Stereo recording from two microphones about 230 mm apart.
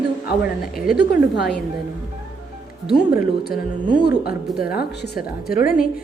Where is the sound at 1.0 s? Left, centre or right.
Left.